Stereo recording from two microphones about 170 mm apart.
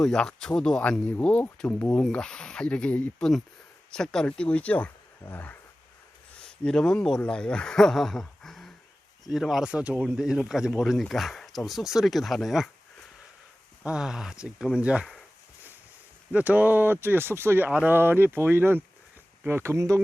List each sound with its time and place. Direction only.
0.0 s speech: 5° left (ahead or behind)
13.8 s speech: 5° right (ahead or behind)
16.3 s speech: 10° right (ahead or behind)